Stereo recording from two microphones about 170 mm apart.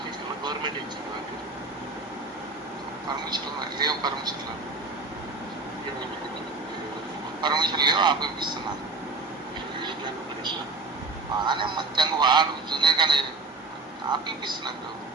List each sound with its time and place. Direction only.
3.2 s a man's voice: 25° right (ahead or behind)
7.4 s a man's voice: 25° right (ahead or behind)
11.4 s a man's voice: 25° right (ahead or behind)